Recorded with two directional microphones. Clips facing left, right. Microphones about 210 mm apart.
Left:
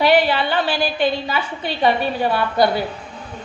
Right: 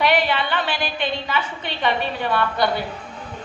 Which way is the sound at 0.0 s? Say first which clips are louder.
Left 4 dB; 30° left (ahead or behind).